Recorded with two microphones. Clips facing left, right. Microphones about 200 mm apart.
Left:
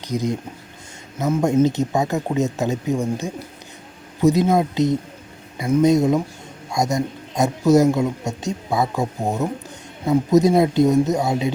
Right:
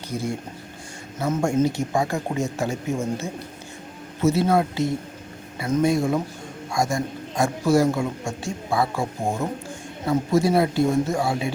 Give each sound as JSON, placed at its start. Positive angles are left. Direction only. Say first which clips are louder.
{"t": 0.1, "sound": "a man's voice", "louder": "left 5 dB", "side_deg": 15}
{"t": 10.1, "sound": "a man's voice", "louder": "left 5 dB", "side_deg": 20}